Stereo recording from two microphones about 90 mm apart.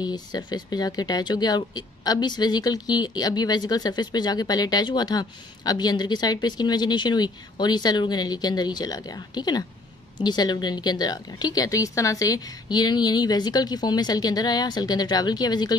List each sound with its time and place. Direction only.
0.0 s a woman's voice: 50° left (ahead or behind)